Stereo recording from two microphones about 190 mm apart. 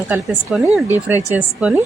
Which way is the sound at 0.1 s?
10° right (ahead or behind).